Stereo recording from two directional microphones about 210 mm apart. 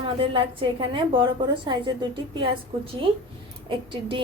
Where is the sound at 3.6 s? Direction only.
25° right (ahead or behind).